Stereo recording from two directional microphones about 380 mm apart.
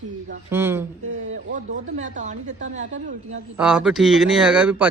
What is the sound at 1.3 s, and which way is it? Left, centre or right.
Speech, centre.